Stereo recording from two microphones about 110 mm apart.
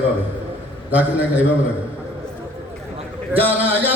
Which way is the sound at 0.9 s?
15° right (ahead or behind).